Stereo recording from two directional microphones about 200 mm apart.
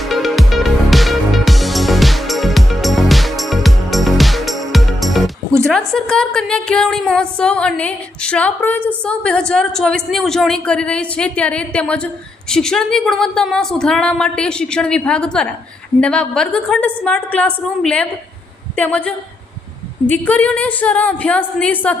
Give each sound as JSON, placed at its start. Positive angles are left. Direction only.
{"t": 0.0, "sound": "music", "side_deg": 0}
{"t": 5.9, "sound": "a woman's voice", "side_deg": 5}